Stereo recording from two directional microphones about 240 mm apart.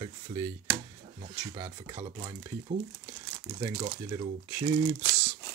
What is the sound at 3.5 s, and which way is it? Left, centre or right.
Speech, centre.